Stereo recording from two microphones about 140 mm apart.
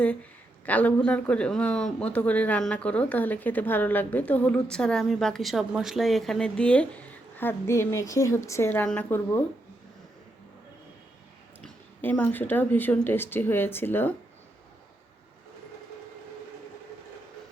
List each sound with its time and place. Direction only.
0.0 s a woman's voice: 10° left (ahead or behind)
11.6 s speech: 10° left (ahead or behind)